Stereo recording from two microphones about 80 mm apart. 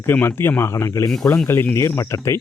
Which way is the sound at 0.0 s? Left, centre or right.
Left.